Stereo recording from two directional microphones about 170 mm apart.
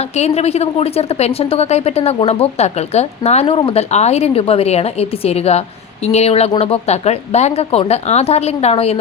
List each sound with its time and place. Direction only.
0.2 s a woman's voice: 40° left (ahead or behind)